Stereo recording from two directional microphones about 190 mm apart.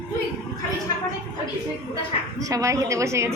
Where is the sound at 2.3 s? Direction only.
15° right (ahead or behind).